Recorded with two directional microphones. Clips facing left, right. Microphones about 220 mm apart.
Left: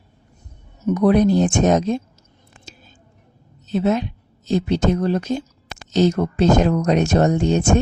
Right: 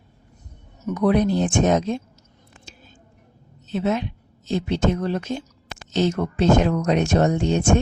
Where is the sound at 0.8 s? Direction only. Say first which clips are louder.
Left 4 dB; 40° left (ahead or behind).